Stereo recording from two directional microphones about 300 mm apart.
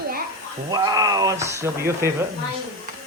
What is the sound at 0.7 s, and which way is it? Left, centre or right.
Speech, centre.